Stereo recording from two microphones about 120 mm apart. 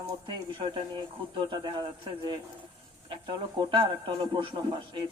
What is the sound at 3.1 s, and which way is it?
Speech, 45° right (ahead or behind).